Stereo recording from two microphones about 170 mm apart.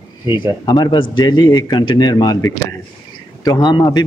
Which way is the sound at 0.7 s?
25° left (ahead or behind).